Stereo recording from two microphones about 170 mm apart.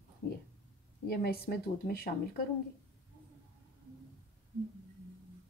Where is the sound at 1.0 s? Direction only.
65° left (ahead or behind).